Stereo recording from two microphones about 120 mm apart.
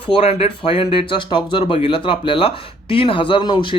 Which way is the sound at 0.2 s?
60° left (ahead or behind).